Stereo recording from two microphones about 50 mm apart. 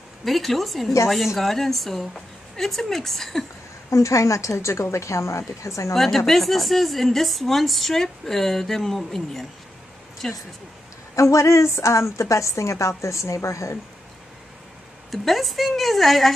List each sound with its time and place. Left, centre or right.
0.2 s a woman's voice: centre
3.9 s a woman's voice: left
5.9 s a woman's voice: centre
11.1 s a woman's voice: left
15.0 s a woman's voice: centre